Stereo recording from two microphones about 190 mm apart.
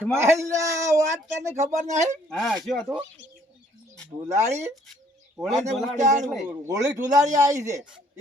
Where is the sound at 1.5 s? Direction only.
40° right (ahead or behind).